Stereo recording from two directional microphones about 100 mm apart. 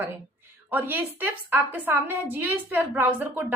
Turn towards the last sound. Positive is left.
turn(degrees=-20)  # may be behind; listen again after turning